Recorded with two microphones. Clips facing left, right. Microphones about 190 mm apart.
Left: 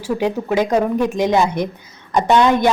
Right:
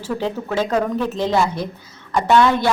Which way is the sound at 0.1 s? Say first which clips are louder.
Left 4 dB; 15° left (ahead or behind).